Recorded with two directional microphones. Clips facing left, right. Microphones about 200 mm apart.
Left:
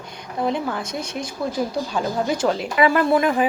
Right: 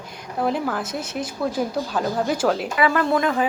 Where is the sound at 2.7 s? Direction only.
20° left (ahead or behind).